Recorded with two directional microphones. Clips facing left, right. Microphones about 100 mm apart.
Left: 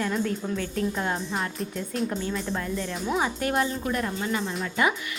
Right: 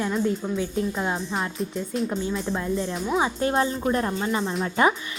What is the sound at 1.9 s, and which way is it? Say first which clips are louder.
Speech: right 2 dB; centre (ahead or behind).